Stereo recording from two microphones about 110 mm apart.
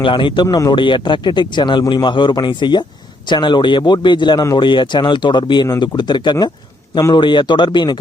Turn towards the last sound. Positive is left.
turn(degrees=45)  # may be behind; listen again after turning